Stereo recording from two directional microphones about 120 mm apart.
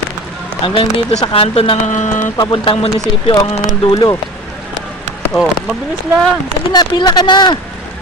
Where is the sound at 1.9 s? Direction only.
90° left.